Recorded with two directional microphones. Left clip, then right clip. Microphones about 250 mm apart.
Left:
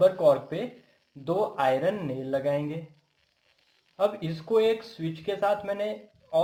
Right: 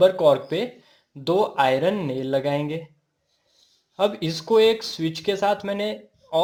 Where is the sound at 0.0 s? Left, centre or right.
Right.